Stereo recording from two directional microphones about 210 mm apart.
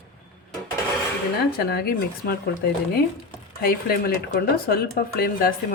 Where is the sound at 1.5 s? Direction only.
50° left (ahead or behind).